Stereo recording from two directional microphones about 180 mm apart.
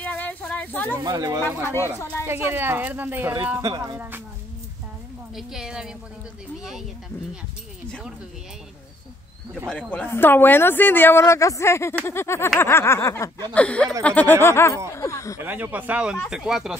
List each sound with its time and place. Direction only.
0.0 s a sound: 10° left (ahead or behind)
0.9 s speech: 20° right (ahead or behind)
5.3 s a woman's voice: 5° right (ahead or behind)
9.7 s speech: 5° left (ahead or behind)
15.3 s a woman's voice: 10° right (ahead or behind)